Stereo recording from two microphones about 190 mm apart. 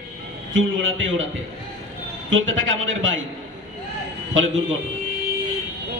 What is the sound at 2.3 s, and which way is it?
Speech, 90° right.